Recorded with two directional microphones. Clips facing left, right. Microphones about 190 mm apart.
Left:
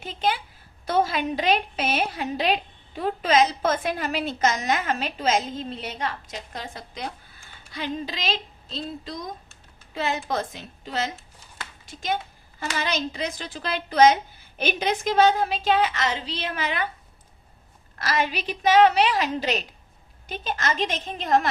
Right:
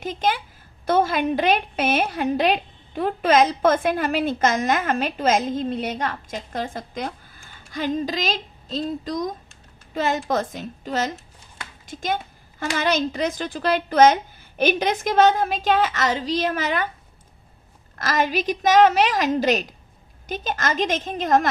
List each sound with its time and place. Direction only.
0.0 s a woman's voice: 50° right (ahead or behind)
17.9 s a woman's voice: 45° right (ahead or behind)